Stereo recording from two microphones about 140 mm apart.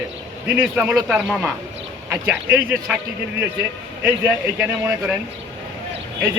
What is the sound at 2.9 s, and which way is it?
A man's voice, 5° right (ahead or behind).